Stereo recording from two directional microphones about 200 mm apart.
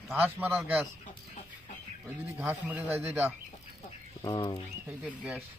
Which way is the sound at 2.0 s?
10° right (ahead or behind).